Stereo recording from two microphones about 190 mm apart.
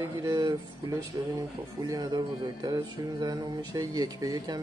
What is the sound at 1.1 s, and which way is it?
Music, 20° right (ahead or behind).